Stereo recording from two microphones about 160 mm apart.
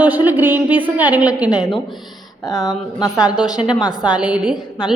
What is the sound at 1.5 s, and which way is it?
A woman's voice, 25° left (ahead or behind).